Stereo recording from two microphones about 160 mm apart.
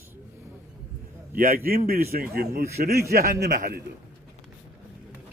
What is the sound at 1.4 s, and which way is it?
A man's voice, 65° right (ahead or behind).